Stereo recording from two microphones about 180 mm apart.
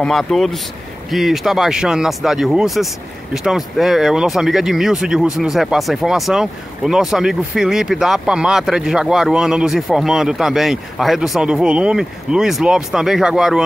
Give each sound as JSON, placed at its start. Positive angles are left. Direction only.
{"t": 0.0, "sound": "speech", "side_deg": 0}